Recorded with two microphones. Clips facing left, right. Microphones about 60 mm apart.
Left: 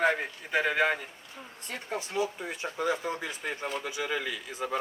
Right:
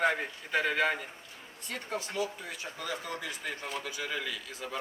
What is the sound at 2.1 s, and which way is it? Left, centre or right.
Speech, left.